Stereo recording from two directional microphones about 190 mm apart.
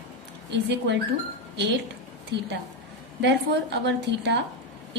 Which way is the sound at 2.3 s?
65° right (ahead or behind).